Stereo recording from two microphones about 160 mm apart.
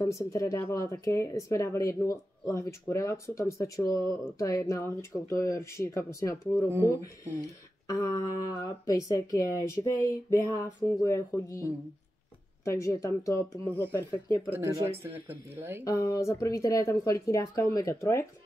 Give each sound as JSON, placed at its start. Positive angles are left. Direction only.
{"t": 0.0, "sound": "speech", "side_deg": 20}
{"t": 7.9, "sound": "speech", "side_deg": 20}
{"t": 14.5, "sound": "speech", "side_deg": -20}
{"t": 15.8, "sound": "speech", "side_deg": 20}